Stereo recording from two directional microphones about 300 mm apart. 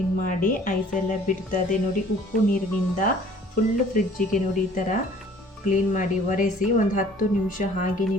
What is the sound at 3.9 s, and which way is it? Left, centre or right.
A woman's voice, left.